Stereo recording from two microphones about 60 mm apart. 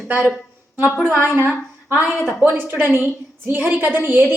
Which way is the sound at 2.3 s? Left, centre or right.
Right.